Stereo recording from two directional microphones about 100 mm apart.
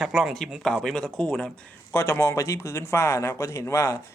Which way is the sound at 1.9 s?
25° left (ahead or behind).